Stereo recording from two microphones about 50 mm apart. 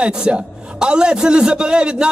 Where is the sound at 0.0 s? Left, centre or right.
Centre.